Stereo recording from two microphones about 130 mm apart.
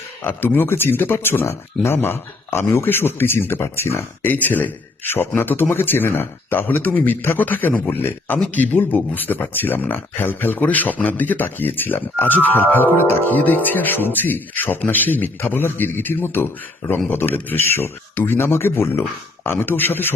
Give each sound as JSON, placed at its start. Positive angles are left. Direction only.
{"t": 0.2, "sound": "a man's voice", "side_deg": 15}